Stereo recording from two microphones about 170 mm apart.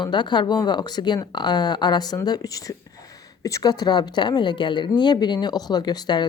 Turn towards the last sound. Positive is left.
turn(degrees=25)  # may be behind; listen again after turning